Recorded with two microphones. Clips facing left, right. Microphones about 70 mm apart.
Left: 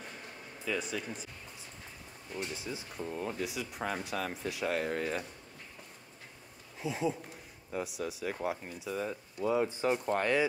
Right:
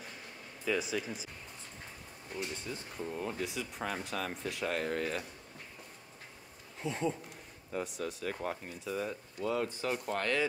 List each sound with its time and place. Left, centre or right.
0.7 s speech: centre
2.5 s speech: centre
6.8 s speech: centre
9.5 s speech: centre